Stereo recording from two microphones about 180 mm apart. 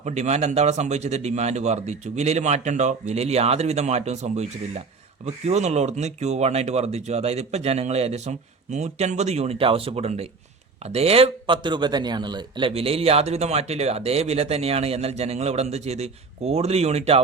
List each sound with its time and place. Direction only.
0.0 s a man's voice: 40° right (ahead or behind)